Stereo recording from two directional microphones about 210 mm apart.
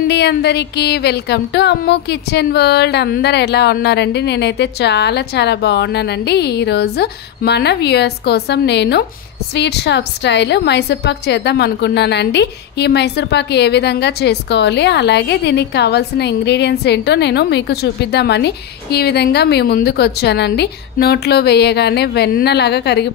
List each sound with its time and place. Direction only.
0.1 s a woman's voice: 50° left (ahead or behind)